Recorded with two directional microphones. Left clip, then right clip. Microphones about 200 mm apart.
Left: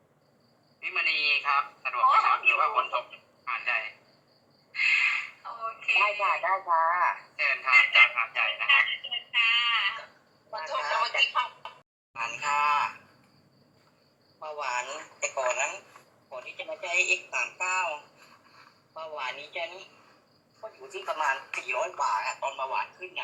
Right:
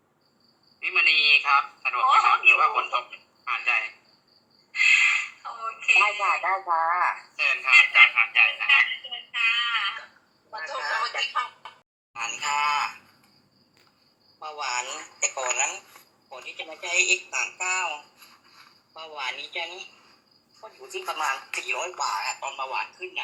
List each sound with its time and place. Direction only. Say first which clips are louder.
0.8 s telephone: right 7 dB; 15° right (ahead or behind)
9.4 s a sound: right 1 dB; 15° right (ahead or behind)
11.0 s music: left 1 dB; 15° right (ahead or behind)
12.1 s speech: right 1 dB; 15° right (ahead or behind)
14.3 s speech: right 2 dB; 15° right (ahead or behind)